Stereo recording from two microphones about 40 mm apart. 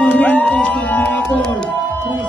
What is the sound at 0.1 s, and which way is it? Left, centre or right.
Music, left.